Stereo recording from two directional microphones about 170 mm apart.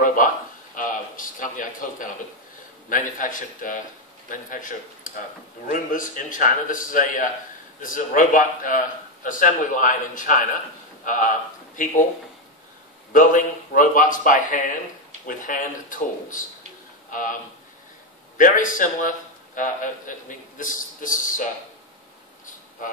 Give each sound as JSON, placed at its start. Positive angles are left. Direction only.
{"t": 0.0, "sound": "a man's voice", "side_deg": 50}
{"t": 13.1, "sound": "a man's voice", "side_deg": 50}
{"t": 18.4, "sound": "a man's voice", "side_deg": 50}